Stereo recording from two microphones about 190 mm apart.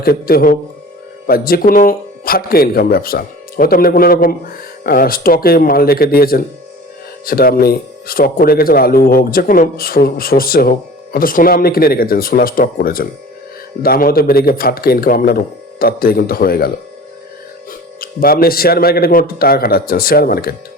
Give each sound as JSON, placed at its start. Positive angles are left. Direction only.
{"t": 0.0, "sound": "a man's voice", "side_deg": 55}